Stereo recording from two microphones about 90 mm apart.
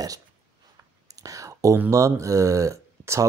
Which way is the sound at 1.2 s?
40° right (ahead or behind).